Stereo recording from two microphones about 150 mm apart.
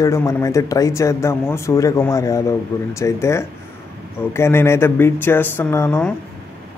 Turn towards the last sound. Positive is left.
turn(degrees=10)  # may be behind; listen again after turning